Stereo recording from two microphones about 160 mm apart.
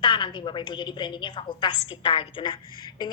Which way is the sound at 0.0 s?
30° left (ahead or behind).